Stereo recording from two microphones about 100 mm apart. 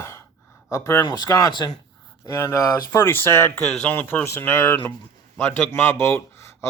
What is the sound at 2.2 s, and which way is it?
Speech, 30° left (ahead or behind).